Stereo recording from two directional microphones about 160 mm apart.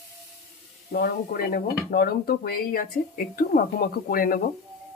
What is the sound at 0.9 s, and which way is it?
Speech, 75° left (ahead or behind).